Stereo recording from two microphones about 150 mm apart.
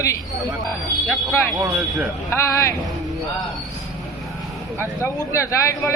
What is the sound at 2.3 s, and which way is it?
Speech, 20° left (ahead or behind).